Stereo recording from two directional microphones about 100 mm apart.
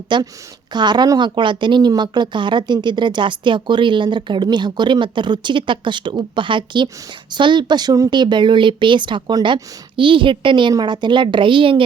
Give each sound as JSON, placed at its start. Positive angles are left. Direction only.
{"t": 0.1, "sound": "speech", "side_deg": -50}
{"t": 1.4, "sound": "speech", "side_deg": -50}
{"t": 8.1, "sound": "a woman's voice", "side_deg": -50}